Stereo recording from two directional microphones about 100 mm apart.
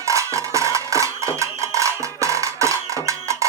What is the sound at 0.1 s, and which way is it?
Music, 30° right (ahead or behind).